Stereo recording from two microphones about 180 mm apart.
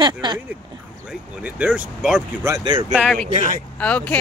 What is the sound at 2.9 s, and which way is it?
Speech, 5° left (ahead or behind).